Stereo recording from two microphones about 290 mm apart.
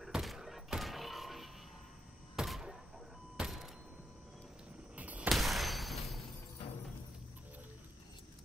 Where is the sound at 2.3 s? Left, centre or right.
Centre.